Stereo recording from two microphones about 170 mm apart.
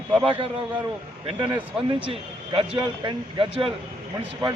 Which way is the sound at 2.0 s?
30° right (ahead or behind).